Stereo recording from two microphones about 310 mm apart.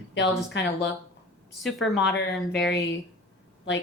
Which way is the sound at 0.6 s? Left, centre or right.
Left.